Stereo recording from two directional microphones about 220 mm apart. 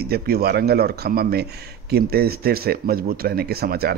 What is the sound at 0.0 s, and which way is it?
A man's voice, 45° right (ahead or behind).